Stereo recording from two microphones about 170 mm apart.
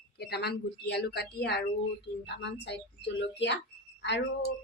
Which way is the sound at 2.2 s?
85° left.